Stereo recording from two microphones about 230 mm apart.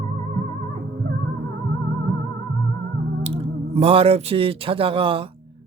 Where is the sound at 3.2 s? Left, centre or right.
Right.